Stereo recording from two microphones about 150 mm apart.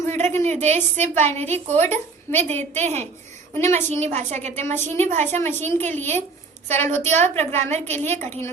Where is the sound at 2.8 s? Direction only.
50° right (ahead or behind).